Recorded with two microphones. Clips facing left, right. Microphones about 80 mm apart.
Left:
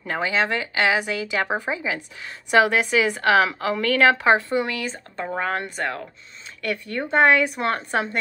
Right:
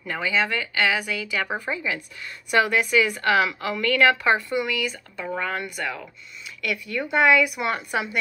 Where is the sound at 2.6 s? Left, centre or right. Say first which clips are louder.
Left 2 dB; left.